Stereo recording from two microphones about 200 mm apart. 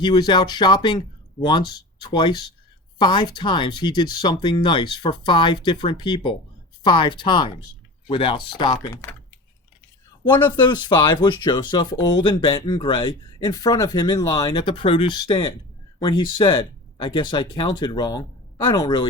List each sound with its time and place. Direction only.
0.0 s speech: 20° left (ahead or behind)
10.4 s speech: 20° left (ahead or behind)